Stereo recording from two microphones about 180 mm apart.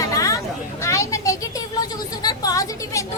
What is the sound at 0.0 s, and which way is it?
Hubbub, 20° left (ahead or behind).